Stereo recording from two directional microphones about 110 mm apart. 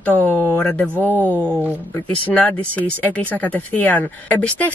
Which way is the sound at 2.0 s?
15° left (ahead or behind).